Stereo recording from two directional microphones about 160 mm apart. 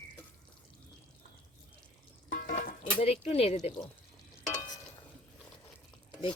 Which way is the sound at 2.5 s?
55° left (ahead or behind).